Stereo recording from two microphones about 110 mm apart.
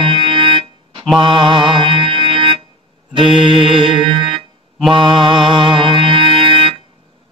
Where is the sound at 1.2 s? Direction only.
50° right (ahead or behind).